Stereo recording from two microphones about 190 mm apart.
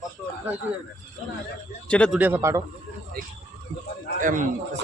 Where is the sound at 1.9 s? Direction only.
5° left (ahead or behind).